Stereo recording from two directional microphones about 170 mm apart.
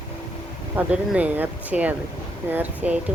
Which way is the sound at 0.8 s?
10° right (ahead or behind).